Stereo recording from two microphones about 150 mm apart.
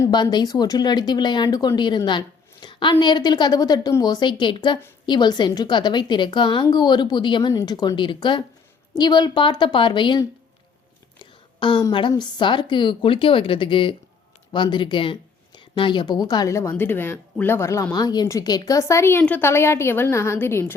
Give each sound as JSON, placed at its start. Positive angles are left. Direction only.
{"t": 0.0, "sound": "a woman's voice", "side_deg": 30}